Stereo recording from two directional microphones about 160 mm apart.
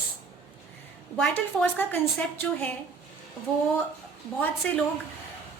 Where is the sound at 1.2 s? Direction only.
10° left (ahead or behind).